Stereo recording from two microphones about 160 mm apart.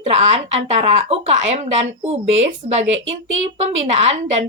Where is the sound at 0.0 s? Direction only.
40° right (ahead or behind).